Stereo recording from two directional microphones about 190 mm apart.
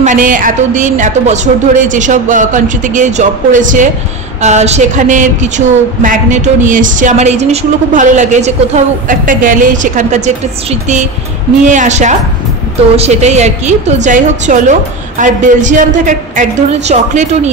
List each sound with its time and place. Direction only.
0.0 s a woman's voice: 40° right (ahead or behind)